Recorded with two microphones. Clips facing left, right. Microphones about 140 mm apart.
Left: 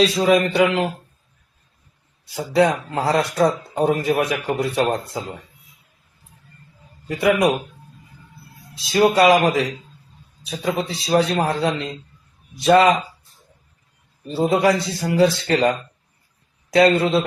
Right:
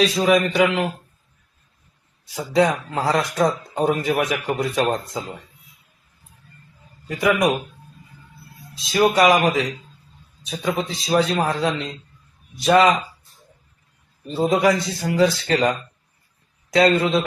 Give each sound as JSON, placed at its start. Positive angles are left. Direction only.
{"t": 0.0, "sound": "a man's voice", "side_deg": 30}
{"t": 2.3, "sound": "speech", "side_deg": 30}
{"t": 7.1, "sound": "speech", "side_deg": 30}
{"t": 8.8, "sound": "speech", "side_deg": 30}
{"t": 14.3, "sound": "a man's voice", "side_deg": 30}
{"t": 16.7, "sound": "speech", "side_deg": 25}